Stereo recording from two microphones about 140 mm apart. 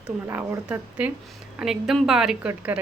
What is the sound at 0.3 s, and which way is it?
A woman's voice, 20° right (ahead or behind).